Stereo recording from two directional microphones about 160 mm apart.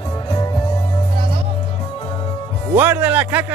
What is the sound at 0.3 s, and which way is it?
Music, 30° left (ahead or behind).